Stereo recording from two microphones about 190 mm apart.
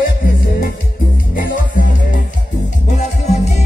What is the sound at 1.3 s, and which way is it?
Music, 45° left (ahead or behind).